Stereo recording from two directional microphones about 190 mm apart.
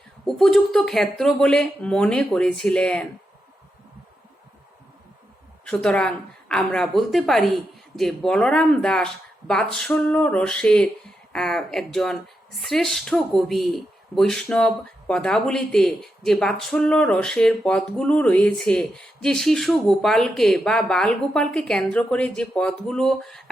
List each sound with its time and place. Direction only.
0.3 s speech: centre (ahead or behind)
5.6 s speech: 5° left (ahead or behind)